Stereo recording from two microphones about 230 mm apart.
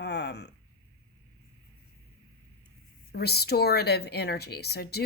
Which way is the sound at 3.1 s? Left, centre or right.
Left.